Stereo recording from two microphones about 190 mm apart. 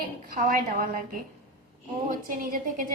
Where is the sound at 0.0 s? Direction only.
45° right (ahead or behind).